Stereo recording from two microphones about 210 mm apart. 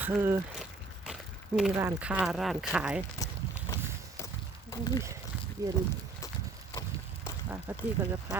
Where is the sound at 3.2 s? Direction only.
15° left (ahead or behind).